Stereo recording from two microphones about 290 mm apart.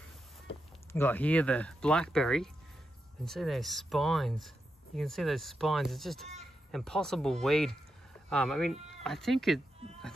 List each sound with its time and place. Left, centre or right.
0.9 s speech: centre